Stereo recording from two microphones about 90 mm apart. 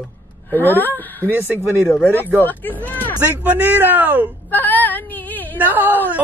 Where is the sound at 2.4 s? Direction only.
20° left (ahead or behind).